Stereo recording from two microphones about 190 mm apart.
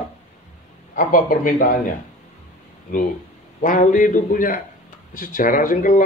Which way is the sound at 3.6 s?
45° left (ahead or behind).